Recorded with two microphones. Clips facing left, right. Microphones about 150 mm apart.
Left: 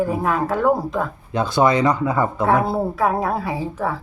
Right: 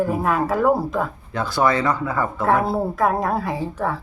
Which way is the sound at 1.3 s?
20° left (ahead or behind).